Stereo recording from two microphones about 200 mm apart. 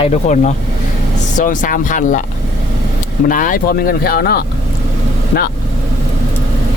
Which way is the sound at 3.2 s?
45° left (ahead or behind).